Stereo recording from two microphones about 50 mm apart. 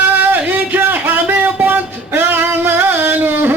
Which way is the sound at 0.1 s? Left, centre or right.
Right.